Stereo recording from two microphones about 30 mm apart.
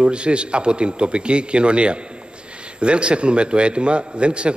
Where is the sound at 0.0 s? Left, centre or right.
Right.